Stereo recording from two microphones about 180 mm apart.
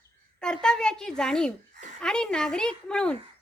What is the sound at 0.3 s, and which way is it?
A woman's voice, 5° left (ahead or behind).